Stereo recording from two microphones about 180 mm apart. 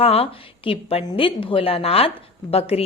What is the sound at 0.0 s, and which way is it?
A woman's voice, 30° left (ahead or behind).